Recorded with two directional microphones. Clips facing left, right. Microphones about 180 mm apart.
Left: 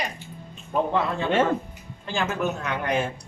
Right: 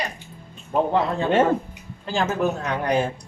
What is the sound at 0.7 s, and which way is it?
Speech, 35° right (ahead or behind).